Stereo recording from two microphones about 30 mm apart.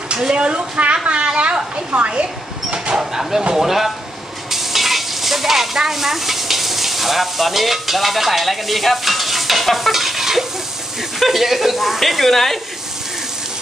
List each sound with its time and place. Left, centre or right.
0.4 s a woman's voice: right
1.9 s a woman's voice: right
2.7 s speech: right
3.5 s speech: centre
4.5 s stir: centre
5.9 s speech: centre